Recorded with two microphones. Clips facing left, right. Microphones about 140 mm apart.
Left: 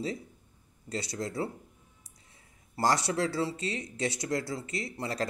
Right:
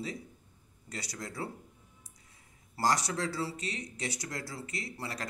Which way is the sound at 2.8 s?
25° left (ahead or behind).